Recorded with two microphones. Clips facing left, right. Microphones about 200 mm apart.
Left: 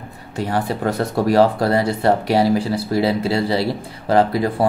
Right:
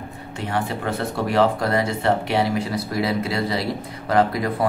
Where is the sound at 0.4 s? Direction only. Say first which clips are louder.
Left 5 dB; 35° left (ahead or behind).